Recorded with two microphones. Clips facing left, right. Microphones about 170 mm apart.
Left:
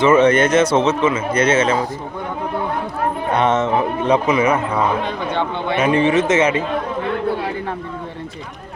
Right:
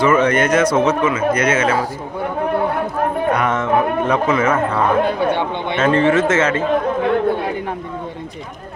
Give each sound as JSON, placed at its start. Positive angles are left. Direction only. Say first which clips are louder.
{"t": 0.0, "sound": "speech", "louder": "left 2 dB", "side_deg": 25}
{"t": 3.3, "sound": "speech", "louder": "left 5 dB", "side_deg": 25}
{"t": 5.0, "sound": "speech", "louder": "right 4 dB", "side_deg": -10}
{"t": 5.7, "sound": "a man's voice", "louder": "right 1 dB", "side_deg": 15}